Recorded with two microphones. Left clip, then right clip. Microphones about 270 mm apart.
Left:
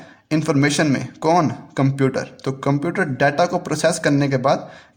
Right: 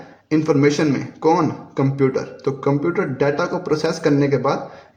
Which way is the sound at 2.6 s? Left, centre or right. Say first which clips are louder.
Even; left.